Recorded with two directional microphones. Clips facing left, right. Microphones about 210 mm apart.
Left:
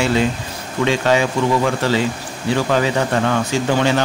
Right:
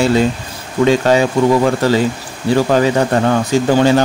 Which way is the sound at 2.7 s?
40° right (ahead or behind).